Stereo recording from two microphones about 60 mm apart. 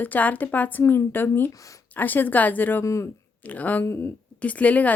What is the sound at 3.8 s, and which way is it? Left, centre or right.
Speech, left.